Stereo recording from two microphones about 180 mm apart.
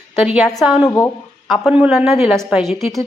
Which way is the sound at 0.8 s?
15° left (ahead or behind).